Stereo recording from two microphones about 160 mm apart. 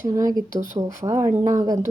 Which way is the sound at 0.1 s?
20° right (ahead or behind).